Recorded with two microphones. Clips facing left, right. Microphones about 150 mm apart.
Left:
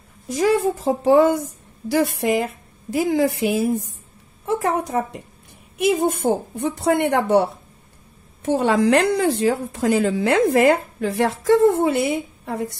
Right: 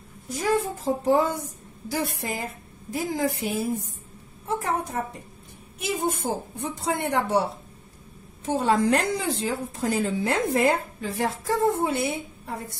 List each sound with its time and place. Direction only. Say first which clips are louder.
0.3 s a woman's voice: left 7 dB; 90° left
5.8 s a woman's voice: left 8 dB; 60° left (ahead or behind)
8.5 s a woman's voice: left 4 dB; 70° left (ahead or behind)